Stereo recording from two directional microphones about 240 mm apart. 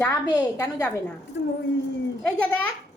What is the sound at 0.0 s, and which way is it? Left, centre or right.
A woman's voice, centre.